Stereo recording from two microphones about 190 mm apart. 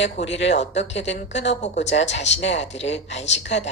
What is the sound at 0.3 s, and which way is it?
Speech, 70° left (ahead or behind).